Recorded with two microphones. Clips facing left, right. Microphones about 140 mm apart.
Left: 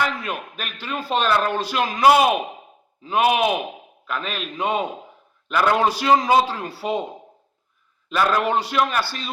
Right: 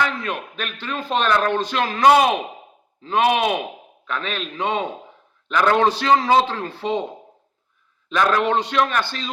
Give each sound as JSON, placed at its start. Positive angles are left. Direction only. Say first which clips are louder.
{"t": 0.0, "sound": "a man's voice", "louder": "right 1 dB", "side_deg": 10}
{"t": 8.1, "sound": "a man's voice", "louder": "right 1 dB", "side_deg": 5}